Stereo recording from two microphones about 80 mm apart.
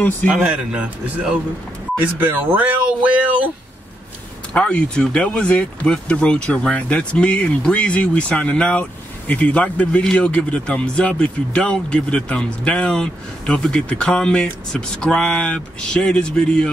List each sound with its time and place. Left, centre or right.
0.4 s a man's voice: centre
4.6 s a man's voice: centre